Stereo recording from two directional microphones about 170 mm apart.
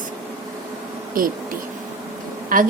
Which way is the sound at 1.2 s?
55° right (ahead or behind).